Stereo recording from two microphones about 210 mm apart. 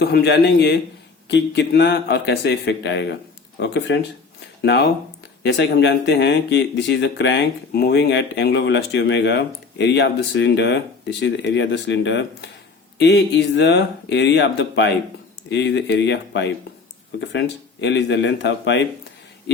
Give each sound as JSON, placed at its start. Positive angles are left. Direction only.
{"t": 0.0, "sound": "a man's voice", "side_deg": 55}